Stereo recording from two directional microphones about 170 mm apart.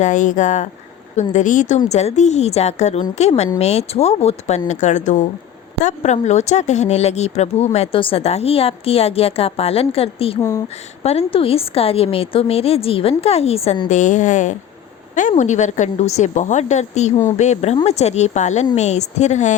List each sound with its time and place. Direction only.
0.0 s a woman's voice: 50° left (ahead or behind)